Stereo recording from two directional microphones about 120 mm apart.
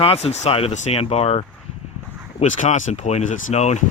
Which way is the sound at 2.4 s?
90° left.